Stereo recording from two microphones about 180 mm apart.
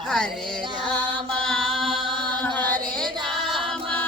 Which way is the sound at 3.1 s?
25° right (ahead or behind).